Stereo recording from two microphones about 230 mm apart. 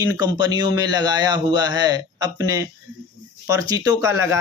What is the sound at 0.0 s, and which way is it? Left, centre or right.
Speech, centre.